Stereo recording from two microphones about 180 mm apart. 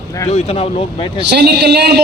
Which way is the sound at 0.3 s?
35° left (ahead or behind).